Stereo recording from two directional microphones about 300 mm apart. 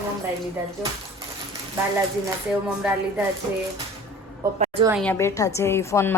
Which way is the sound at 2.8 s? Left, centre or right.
Centre.